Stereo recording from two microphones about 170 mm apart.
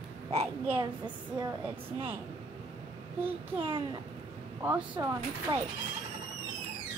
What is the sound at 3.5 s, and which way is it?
Speech, 30° right (ahead or behind).